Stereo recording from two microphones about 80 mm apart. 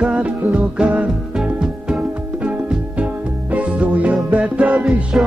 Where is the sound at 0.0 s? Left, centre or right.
Centre.